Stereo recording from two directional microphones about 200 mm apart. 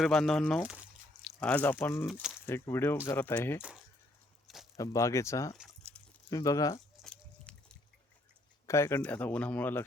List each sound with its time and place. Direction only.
0.0 s speech: 5° left (ahead or behind)
2.0 s speech: centre (ahead or behind)
2.5 s speech: 10° left (ahead or behind)
4.4 s a sound: centre (ahead or behind)
4.8 s speech: 15° left (ahead or behind)
5.5 s a sound: 5° left (ahead or behind)
6.3 s speech: 15° left (ahead or behind)
6.9 s a sound: 5° left (ahead or behind)
8.6 s speech: 15° left (ahead or behind)